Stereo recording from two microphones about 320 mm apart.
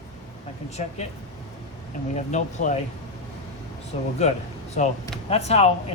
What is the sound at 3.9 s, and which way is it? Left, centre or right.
Speech, centre.